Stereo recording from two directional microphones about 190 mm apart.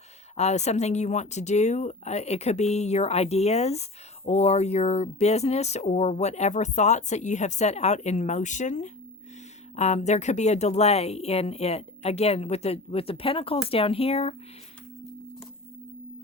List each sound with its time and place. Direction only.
0.3 s speech: 35° left (ahead or behind)